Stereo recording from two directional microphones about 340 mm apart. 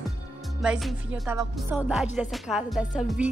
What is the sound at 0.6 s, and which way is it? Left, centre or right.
Speech, centre.